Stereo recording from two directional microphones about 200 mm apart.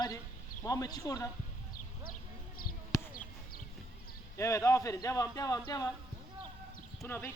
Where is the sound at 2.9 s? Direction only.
15° left (ahead or behind).